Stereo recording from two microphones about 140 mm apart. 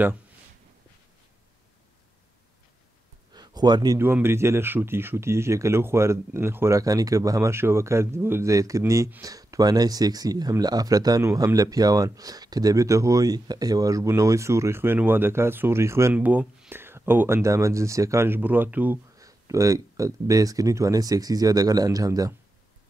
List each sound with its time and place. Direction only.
3.3 s a sound: 30° right (ahead or behind)
4.0 s speech: 15° right (ahead or behind)
19.1 s speech: 25° right (ahead or behind)